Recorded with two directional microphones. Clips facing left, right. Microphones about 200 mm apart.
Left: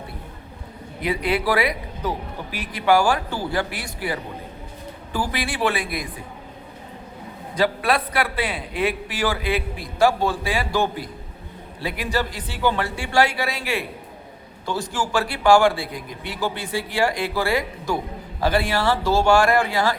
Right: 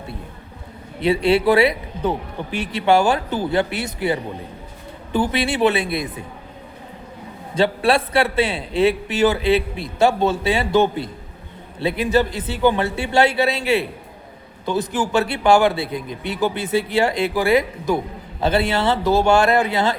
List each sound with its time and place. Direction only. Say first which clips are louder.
1.0 s a man's voice: right 6 dB; 25° right (ahead or behind)
7.5 s a man's voice: right 4 dB; 25° right (ahead or behind)